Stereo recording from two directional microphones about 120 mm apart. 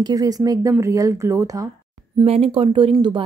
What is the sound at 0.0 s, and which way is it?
Speech, 30° right (ahead or behind).